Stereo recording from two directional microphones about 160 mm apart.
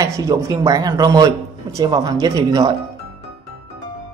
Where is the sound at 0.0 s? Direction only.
20° right (ahead or behind).